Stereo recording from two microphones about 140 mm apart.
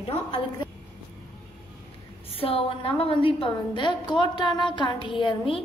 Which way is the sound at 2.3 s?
45° left (ahead or behind).